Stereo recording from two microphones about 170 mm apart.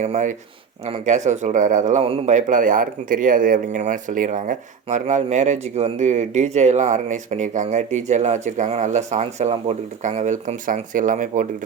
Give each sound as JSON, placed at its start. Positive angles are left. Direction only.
{"t": 0.0, "sound": "speech", "side_deg": -45}
{"t": 2.3, "sound": "speech", "side_deg": -50}